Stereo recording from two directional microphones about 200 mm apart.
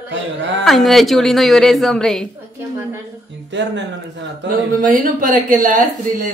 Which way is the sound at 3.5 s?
65° right (ahead or behind).